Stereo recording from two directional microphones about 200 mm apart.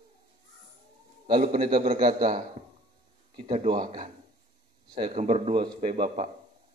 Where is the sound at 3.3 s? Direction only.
30° right (ahead or behind).